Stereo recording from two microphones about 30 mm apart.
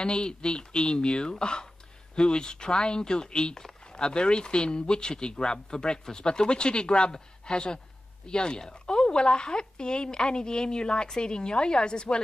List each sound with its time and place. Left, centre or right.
0.0 s speech: left